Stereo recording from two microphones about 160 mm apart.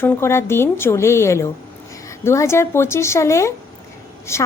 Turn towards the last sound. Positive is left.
turn(degrees=15)  # may be behind; listen again after turning